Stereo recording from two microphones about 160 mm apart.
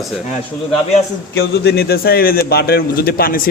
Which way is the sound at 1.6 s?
85° left.